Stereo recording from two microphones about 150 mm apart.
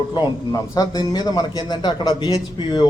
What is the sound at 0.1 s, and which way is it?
A man's voice, 25° left (ahead or behind).